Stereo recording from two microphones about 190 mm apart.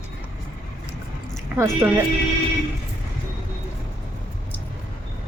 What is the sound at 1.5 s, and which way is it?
Speech, 15° right (ahead or behind).